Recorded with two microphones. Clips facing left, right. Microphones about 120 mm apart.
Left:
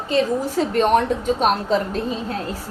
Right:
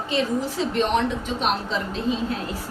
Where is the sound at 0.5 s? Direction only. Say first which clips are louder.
Left 7 dB; 45° left (ahead or behind).